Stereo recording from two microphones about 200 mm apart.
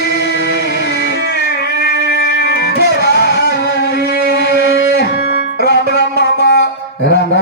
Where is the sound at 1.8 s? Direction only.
55° left (ahead or behind).